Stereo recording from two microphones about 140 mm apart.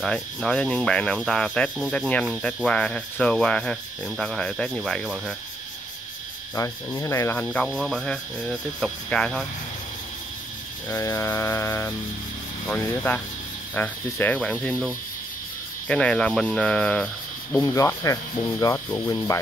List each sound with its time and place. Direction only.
0.0 s speech: 5° left (ahead or behind)
6.5 s mantra: 20° left (ahead or behind)
7.4 s speech: 5° left (ahead or behind)
10.9 s mantra: 20° left (ahead or behind)
12.6 s speech: 10° left (ahead or behind)
15.9 s speech: 5° left (ahead or behind)
17.6 s mantra: 25° left (ahead or behind)